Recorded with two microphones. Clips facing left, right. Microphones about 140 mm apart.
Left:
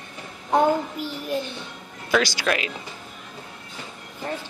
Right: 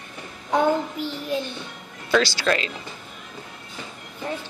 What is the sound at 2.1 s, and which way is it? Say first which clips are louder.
Speech: right 1 dB; 15° left (ahead or behind).